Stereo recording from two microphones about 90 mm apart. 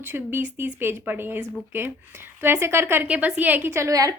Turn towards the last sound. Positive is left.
turn(degrees=-40)  # may be behind; listen again after turning